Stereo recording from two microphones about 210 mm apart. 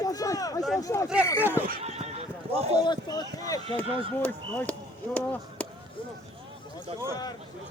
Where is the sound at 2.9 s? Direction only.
20° left (ahead or behind).